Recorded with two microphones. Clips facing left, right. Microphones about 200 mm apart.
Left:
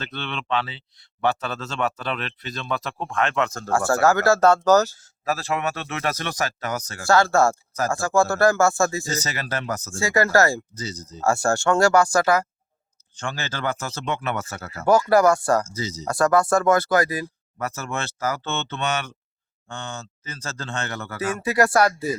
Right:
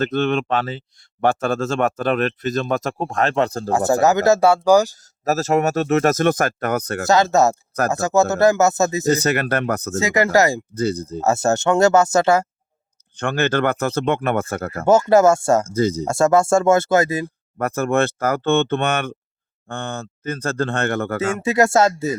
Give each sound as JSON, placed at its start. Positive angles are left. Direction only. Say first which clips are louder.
{"t": 0.0, "sound": "speech", "louder": "right 13 dB", "side_deg": -45}
{"t": 3.7, "sound": "speech", "louder": "right 2 dB", "side_deg": -20}
{"t": 5.2, "sound": "speech", "louder": "right 7 dB", "side_deg": -45}
{"t": 7.1, "sound": "speech", "louder": "right 2 dB", "side_deg": -20}
{"t": 9.0, "sound": "speech", "louder": "right 11 dB", "side_deg": -60}
{"t": 10.0, "sound": "speech", "louder": "right 2 dB", "side_deg": -20}
{"t": 10.8, "sound": "speech", "louder": "right 12 dB", "side_deg": -55}
{"t": 11.2, "sound": "speech", "louder": "right 2 dB", "side_deg": -20}
{"t": 13.1, "sound": "speech", "louder": "right 11 dB", "side_deg": -60}
{"t": 14.8, "sound": "speech", "louder": "right 3 dB", "side_deg": -25}
{"t": 15.6, "sound": "speech", "louder": "right 12 dB", "side_deg": -55}
{"t": 16.0, "sound": "speech", "louder": "right 1 dB", "side_deg": -25}
{"t": 17.6, "sound": "speech", "louder": "right 11 dB", "side_deg": -55}
{"t": 21.2, "sound": "speech", "louder": "right 2 dB", "side_deg": -25}